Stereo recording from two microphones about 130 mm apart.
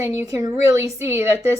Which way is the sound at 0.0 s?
25° right (ahead or behind).